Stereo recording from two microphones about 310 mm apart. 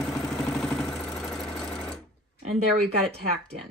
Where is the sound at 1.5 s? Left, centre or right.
Centre.